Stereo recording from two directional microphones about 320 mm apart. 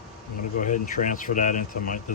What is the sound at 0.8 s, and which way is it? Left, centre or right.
Speech, left.